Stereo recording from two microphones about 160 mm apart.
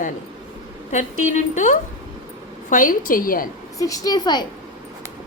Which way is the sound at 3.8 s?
20° left (ahead or behind).